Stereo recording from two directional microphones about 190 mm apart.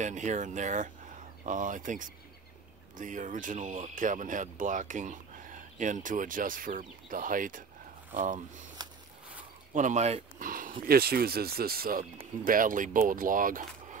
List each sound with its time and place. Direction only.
0.0 s speech: 40° right (ahead or behind)
8.8 s a sound: 20° right (ahead or behind)
9.8 s speech: 40° right (ahead or behind)